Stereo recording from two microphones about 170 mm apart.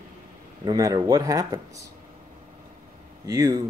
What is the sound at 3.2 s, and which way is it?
Speech, 20° right (ahead or behind).